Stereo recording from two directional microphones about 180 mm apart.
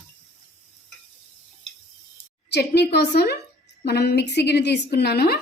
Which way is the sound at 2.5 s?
65° left (ahead or behind).